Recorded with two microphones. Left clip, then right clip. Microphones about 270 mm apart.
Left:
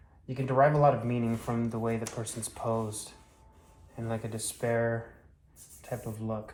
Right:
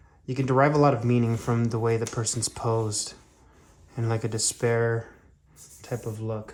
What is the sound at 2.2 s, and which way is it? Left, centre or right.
Speech, right.